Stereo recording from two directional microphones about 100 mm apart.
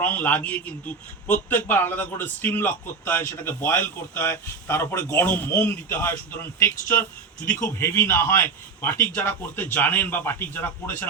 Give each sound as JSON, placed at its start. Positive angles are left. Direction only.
{"t": 0.0, "sound": "a man's voice", "side_deg": 15}